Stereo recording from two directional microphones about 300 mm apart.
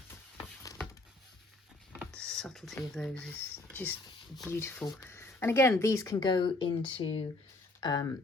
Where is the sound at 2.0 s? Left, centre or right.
Centre.